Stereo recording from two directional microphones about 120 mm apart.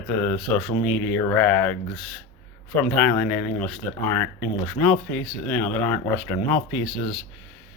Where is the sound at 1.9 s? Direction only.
Centre (ahead or behind).